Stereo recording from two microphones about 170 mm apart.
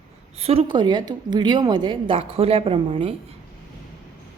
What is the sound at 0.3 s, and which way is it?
A woman's voice, 35° right (ahead or behind).